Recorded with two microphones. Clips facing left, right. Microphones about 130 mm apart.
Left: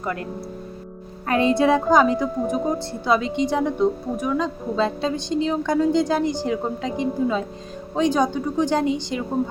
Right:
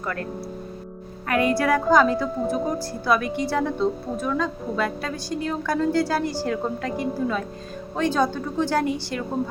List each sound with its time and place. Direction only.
0.0 s speech: 15° left (ahead or behind)
1.3 s a woman's voice: 25° left (ahead or behind)